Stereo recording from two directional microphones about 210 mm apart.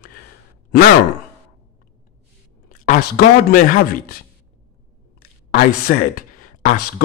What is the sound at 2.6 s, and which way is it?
Speech, 40° left (ahead or behind).